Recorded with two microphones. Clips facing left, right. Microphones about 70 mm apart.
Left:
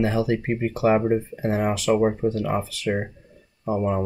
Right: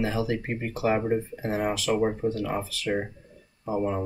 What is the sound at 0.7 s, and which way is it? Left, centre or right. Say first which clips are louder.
Speech: left 4 dB; left.